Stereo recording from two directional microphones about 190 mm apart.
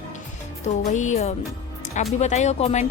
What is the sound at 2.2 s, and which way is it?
Speech, 35° left (ahead or behind).